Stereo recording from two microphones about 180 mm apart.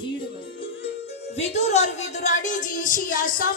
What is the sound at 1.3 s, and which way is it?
A woman's voice, 35° left (ahead or behind).